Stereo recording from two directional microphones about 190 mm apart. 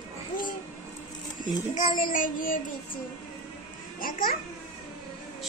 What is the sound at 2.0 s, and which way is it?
Child singing, 45° left (ahead or behind).